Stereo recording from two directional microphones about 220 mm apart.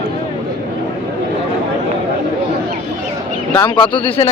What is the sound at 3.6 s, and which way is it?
Speech, 20° left (ahead or behind).